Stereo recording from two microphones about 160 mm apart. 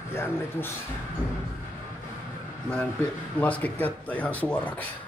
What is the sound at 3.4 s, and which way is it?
Speech, 10° left (ahead or behind).